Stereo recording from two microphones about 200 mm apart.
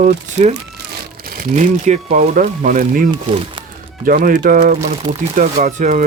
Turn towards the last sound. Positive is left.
turn(degrees=-40)  # may be behind; listen again after turning